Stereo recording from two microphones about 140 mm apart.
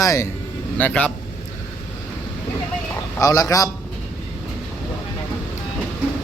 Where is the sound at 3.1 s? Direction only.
25° left (ahead or behind).